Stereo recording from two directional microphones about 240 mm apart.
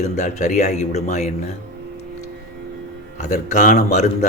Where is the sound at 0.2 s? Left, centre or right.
Left.